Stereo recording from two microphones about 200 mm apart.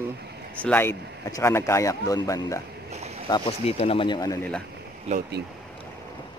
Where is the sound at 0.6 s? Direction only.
10° left (ahead or behind).